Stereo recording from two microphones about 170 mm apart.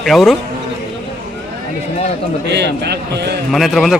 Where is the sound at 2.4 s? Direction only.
80° right.